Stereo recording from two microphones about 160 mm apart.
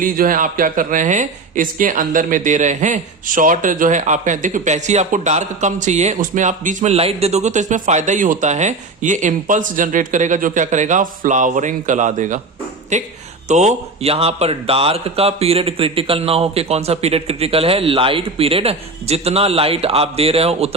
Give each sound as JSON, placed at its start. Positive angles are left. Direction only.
{"t": 0.0, "sound": "speech", "side_deg": -60}